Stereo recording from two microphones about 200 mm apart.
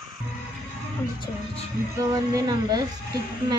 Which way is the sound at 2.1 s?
20° right (ahead or behind).